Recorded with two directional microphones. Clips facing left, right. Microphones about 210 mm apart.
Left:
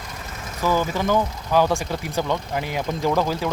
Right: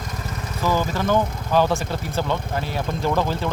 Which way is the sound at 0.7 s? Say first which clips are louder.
Even; 15° left (ahead or behind).